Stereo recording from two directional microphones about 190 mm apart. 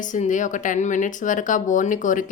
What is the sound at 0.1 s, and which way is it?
Speech, 40° left (ahead or behind).